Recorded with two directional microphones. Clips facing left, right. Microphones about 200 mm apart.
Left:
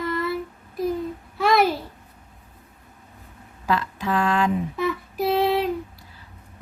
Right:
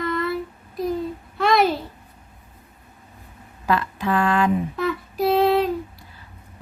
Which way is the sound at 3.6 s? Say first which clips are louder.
Right 2 dB; 55° right (ahead or behind).